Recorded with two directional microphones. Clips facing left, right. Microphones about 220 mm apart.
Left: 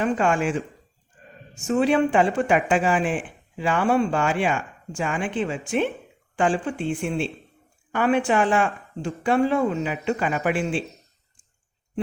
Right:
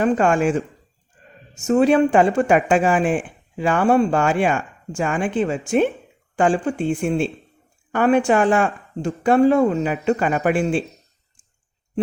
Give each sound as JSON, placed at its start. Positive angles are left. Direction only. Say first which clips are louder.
{"t": 0.0, "sound": "speech", "louder": "right 5 dB", "side_deg": -45}